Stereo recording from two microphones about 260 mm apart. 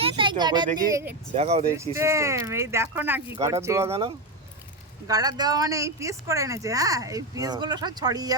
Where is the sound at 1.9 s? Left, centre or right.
Centre.